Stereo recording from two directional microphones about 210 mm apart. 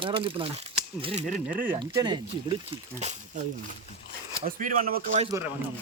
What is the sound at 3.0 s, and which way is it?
Speech, 30° right (ahead or behind).